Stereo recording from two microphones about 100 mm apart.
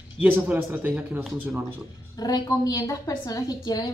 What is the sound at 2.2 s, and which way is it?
A woman's voice, 40° left (ahead or behind).